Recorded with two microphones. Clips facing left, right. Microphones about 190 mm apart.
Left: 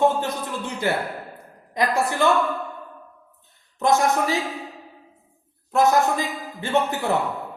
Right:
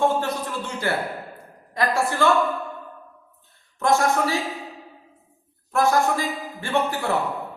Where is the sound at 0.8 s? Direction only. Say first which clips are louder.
Left 2 dB; 20° left (ahead or behind).